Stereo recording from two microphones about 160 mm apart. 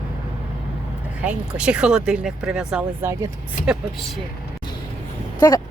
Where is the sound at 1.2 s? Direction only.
5° right (ahead or behind).